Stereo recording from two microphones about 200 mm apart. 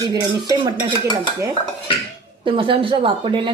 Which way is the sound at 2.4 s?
25° right (ahead or behind).